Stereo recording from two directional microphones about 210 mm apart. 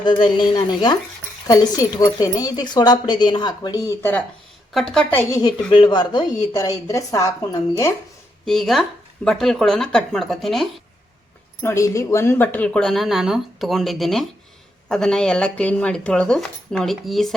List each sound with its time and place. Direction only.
0.0 s speech: 20° left (ahead or behind)
4.7 s speech: centre (ahead or behind)
5.3 s speech: 20° left (ahead or behind)
8.4 s speech: centre (ahead or behind)
11.6 s speech: 15° left (ahead or behind)